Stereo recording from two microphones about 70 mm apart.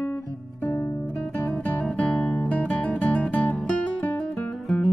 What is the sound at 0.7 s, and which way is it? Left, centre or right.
Music, left.